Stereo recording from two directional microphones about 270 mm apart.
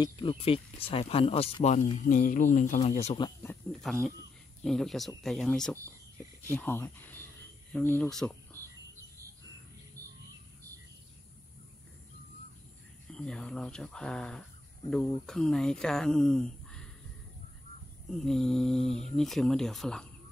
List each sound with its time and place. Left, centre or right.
0.0 s speech: centre
3.3 s speech: centre
13.1 s speech: centre
18.1 s speech: centre